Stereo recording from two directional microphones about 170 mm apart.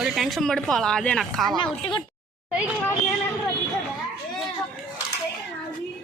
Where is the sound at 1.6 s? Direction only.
30° left (ahead or behind).